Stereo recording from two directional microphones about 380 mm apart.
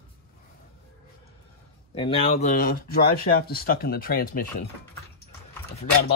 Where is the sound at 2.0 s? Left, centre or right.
Centre.